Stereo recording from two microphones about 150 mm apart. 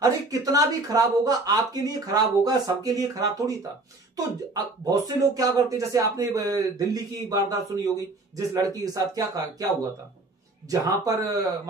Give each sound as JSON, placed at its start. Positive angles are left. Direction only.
{"t": 0.0, "sound": "speech", "side_deg": -25}
{"t": 4.6, "sound": "speech", "side_deg": -25}
{"t": 10.7, "sound": "speech", "side_deg": -25}